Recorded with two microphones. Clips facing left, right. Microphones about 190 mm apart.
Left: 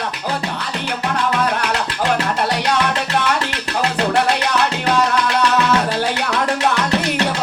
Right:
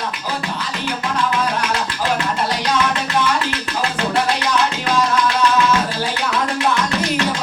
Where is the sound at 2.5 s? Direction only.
65° left (ahead or behind).